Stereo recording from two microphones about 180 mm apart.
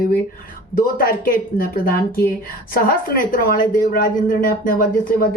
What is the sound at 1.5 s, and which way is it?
A woman's voice, 55° left (ahead or behind).